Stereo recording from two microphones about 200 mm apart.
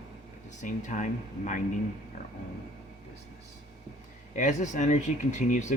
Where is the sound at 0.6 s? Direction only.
40° left (ahead or behind).